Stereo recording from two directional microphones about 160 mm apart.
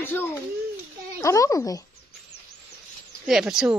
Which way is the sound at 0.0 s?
15° left (ahead or behind).